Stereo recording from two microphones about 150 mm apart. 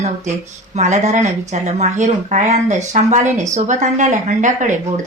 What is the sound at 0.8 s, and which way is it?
Speech, 50° right (ahead or behind).